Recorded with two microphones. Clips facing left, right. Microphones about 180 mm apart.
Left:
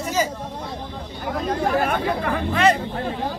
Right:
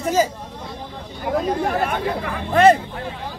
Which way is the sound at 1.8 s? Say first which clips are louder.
Left 1 dB; 50° left (ahead or behind).